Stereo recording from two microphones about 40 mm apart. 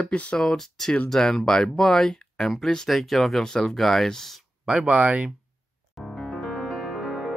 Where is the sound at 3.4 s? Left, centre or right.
Centre.